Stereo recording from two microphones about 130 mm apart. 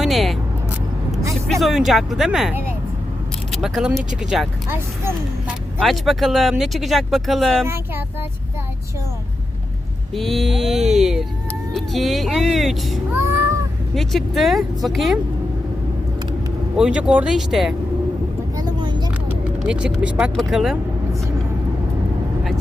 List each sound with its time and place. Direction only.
0.0 s vehicle: centre (ahead or behind)
1.6 s speech: centre (ahead or behind)
4.7 s speech: 15° right (ahead or behind)
5.8 s speech: centre (ahead or behind)
7.6 s speech: 20° right (ahead or behind)
10.2 s speech: centre (ahead or behind)
16.7 s speech: 5° right (ahead or behind)
18.5 s vehicle: 30° right (ahead or behind)
19.6 s speech: 10° right (ahead or behind)